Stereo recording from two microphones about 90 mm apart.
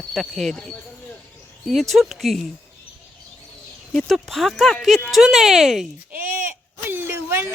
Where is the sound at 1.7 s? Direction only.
Centre (ahead or behind).